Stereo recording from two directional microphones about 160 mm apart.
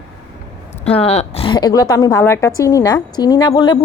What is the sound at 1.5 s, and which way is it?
A woman's voice, 25° left (ahead or behind).